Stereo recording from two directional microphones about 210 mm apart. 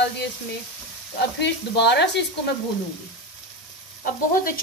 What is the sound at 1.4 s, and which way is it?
Speech, 55° left (ahead or behind).